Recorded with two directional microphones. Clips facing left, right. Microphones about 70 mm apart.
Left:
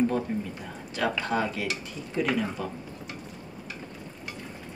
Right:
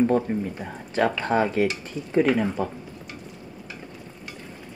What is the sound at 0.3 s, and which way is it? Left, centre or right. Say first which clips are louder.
Speech: right 4 dB; right.